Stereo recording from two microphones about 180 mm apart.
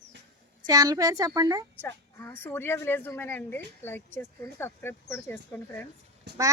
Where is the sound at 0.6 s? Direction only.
20° right (ahead or behind).